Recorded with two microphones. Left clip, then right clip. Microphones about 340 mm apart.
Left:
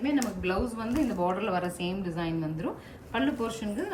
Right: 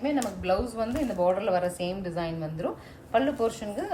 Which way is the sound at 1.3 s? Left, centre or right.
Right.